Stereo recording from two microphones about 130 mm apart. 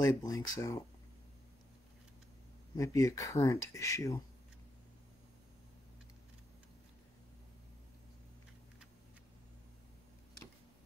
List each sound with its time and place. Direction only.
0.0 s speech: 30° left (ahead or behind)
2.8 s speech: 25° left (ahead or behind)